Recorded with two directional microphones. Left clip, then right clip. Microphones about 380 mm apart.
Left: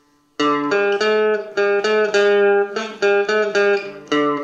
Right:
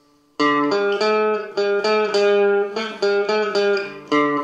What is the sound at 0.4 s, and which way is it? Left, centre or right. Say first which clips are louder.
Music: even; left.